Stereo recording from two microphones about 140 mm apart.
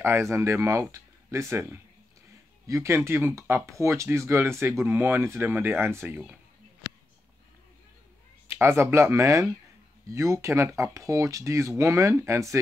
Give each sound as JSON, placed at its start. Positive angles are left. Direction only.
{"t": 0.0, "sound": "speech", "side_deg": -20}
{"t": 8.5, "sound": "speech", "side_deg": -20}